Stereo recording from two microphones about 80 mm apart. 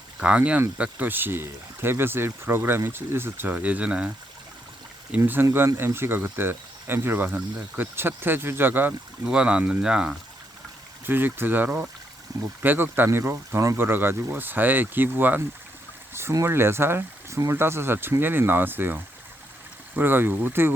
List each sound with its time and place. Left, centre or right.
0.2 s speech: centre
5.1 s speech: right
9.2 s speech: centre
11.0 s speech: right
12.3 s speech: right
12.6 s speech: right